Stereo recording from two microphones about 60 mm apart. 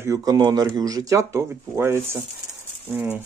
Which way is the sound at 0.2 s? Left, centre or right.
Right.